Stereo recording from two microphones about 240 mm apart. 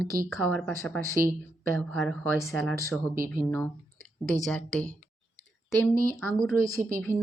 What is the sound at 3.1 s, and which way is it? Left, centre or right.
Speech, right.